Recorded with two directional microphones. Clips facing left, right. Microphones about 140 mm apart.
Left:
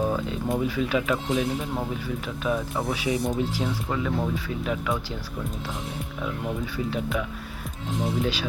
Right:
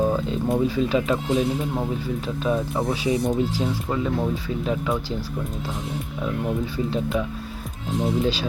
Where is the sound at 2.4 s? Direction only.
25° right (ahead or behind).